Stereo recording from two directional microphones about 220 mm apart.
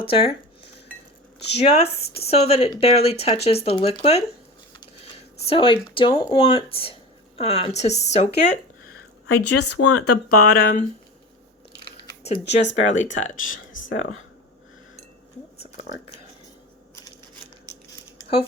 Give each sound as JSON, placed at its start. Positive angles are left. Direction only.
{"t": 0.0, "sound": "speech", "side_deg": 25}
{"t": 1.5, "sound": "speech", "side_deg": 30}
{"t": 9.2, "sound": "a woman's voice", "side_deg": 85}
{"t": 10.6, "sound": "speech", "side_deg": 40}
{"t": 11.9, "sound": "chewing", "side_deg": 25}
{"t": 12.6, "sound": "speech", "side_deg": 55}
{"t": 13.8, "sound": "speech", "side_deg": 30}